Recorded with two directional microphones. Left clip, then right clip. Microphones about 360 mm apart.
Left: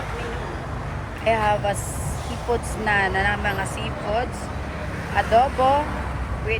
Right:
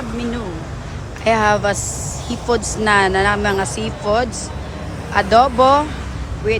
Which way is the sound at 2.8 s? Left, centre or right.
Right.